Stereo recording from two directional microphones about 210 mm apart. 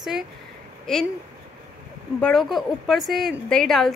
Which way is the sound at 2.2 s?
5° left (ahead or behind).